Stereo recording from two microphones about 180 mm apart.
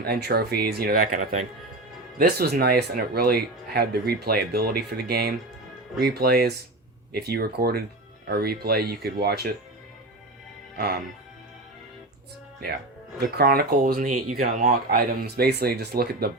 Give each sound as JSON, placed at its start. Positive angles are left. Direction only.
{"t": 0.0, "sound": "speech", "side_deg": -60}
{"t": 10.8, "sound": "speech", "side_deg": -65}
{"t": 13.1, "sound": "speech", "side_deg": -60}